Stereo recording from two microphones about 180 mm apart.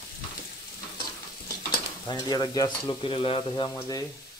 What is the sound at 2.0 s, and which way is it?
Speech, 25° left (ahead or behind).